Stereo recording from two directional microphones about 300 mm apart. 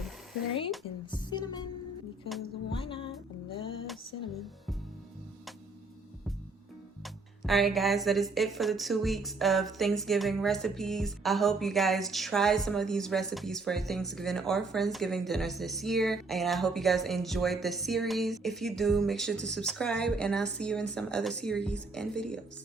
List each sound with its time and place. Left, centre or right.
1.1 s music: centre
2.7 s music: centre
7.0 s speech: centre